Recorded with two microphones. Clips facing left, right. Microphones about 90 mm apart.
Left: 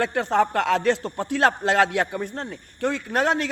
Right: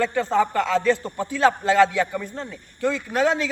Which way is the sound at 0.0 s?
65° left (ahead or behind).